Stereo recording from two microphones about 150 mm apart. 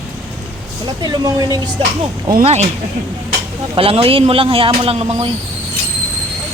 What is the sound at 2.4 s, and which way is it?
Speech, 45° right (ahead or behind).